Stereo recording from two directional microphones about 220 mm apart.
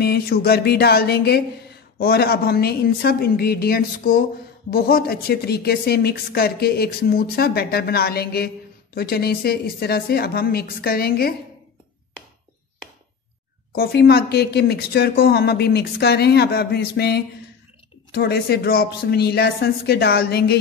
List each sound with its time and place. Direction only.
0.0 s a woman's voice: 45° left (ahead or behind)
13.7 s a woman's voice: 45° left (ahead or behind)